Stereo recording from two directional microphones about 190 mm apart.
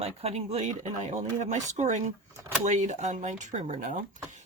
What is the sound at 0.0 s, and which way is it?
Speech, 30° right (ahead or behind).